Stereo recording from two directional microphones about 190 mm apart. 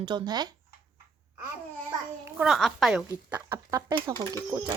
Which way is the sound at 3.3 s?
15° right (ahead or behind).